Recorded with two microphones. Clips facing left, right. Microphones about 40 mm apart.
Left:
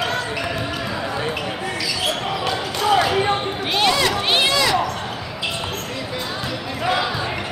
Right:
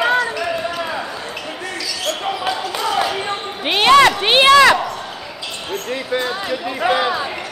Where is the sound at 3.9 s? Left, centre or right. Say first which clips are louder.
Right 10 dB; right.